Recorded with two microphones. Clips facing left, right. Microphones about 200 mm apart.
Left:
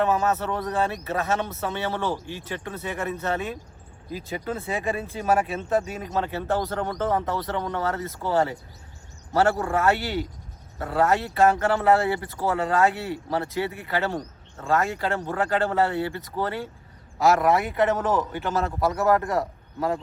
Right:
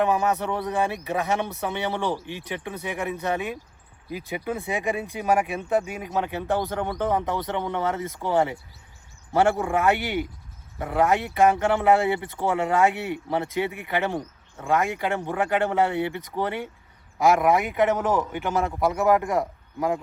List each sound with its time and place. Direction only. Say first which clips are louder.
0.0 s speech: even; 15° right (ahead or behind)